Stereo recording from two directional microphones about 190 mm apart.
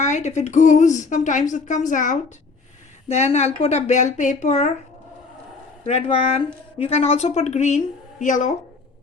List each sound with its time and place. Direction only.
0.0 s speech: 40° left (ahead or behind)
5.8 s speech: 35° left (ahead or behind)